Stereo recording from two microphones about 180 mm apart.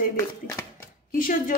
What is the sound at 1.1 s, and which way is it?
Speech, 50° left (ahead or behind).